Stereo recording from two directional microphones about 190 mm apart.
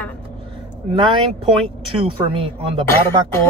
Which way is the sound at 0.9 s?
25° right (ahead or behind).